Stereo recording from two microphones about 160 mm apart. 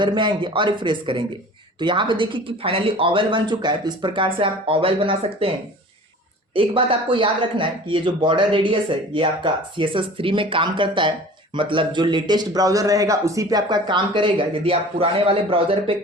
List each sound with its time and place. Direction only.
0.0 s a man's voice: 30° right (ahead or behind)